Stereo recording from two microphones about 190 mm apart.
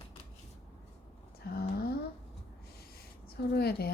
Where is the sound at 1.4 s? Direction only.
55° left (ahead or behind).